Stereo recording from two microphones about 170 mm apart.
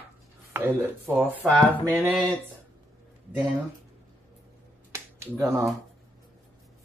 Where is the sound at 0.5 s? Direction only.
10° right (ahead or behind).